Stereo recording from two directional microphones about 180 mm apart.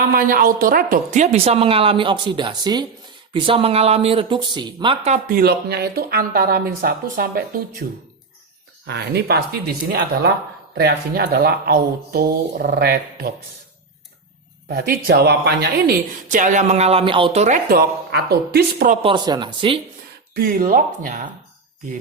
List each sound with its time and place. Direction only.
0.0 s a woman's voice: 50° right (ahead or behind); by 5.1 s 25° right (ahead or behind)
5.1 s a woman's voice: 55° right (ahead or behind)
8.9 s a woman's voice: 65° right (ahead or behind)
14.7 s a woman's voice: 60° right (ahead or behind)
16.3 s a woman's voice: 45° right (ahead or behind)
19.0 s speech: 25° right (ahead or behind)
20.3 s speech: 50° right (ahead or behind)